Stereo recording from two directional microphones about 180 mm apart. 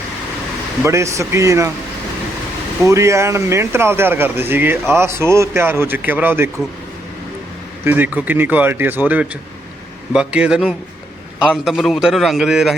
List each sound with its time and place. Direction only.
0.9 s speech: 15° right (ahead or behind)
2.8 s speech: 15° right (ahead or behind)
7.9 s a man's voice: 10° right (ahead or behind)